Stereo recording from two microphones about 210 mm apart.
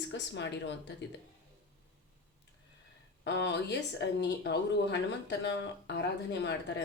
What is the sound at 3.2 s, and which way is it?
Speech, 55° left (ahead or behind).